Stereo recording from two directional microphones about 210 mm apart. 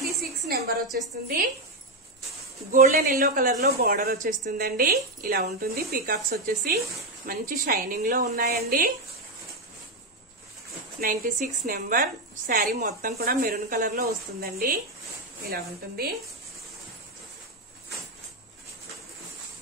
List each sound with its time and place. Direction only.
0.5 s a sound: 50° right (ahead or behind)
2.7 s a woman's voice: 40° right (ahead or behind)
11.0 s a woman's voice: 40° right (ahead or behind)